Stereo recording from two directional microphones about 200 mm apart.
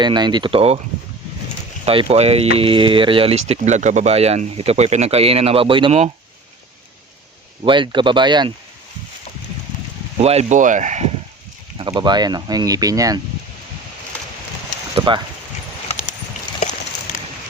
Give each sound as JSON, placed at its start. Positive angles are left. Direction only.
{"t": 0.0, "sound": "speech", "side_deg": -20}
{"t": 1.8, "sound": "speech", "side_deg": -30}
{"t": 7.6, "sound": "speech", "side_deg": -25}
{"t": 10.2, "sound": "speech", "side_deg": -30}
{"t": 11.8, "sound": "speech", "side_deg": -20}
{"t": 14.9, "sound": "speech", "side_deg": -25}